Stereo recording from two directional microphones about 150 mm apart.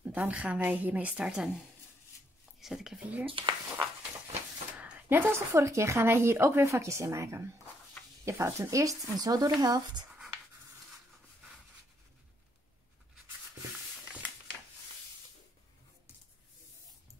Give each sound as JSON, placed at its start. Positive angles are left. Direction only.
{"t": 0.0, "sound": "a woman's voice", "side_deg": -10}
{"t": 2.6, "sound": "speech", "side_deg": 0}
{"t": 3.3, "sound": "speech", "side_deg": -35}
{"t": 4.3, "sound": "speech", "side_deg": -10}